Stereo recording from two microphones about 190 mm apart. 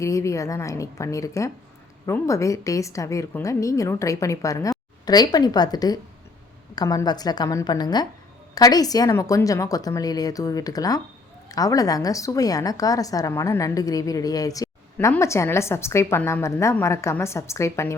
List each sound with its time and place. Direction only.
0.0 s a woman's voice: 15° left (ahead or behind)